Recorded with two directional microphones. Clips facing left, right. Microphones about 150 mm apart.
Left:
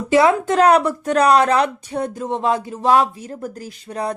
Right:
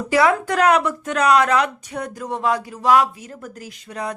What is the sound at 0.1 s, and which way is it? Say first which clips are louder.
Speech: left 3 dB; 25° left (ahead or behind).